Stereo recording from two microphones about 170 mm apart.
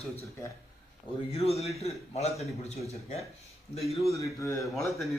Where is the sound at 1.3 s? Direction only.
35° left (ahead or behind).